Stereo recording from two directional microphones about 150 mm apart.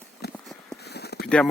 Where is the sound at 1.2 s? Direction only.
5° left (ahead or behind).